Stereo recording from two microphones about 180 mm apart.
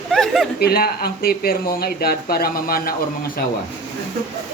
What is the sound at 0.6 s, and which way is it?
Speech, 60° left (ahead or behind).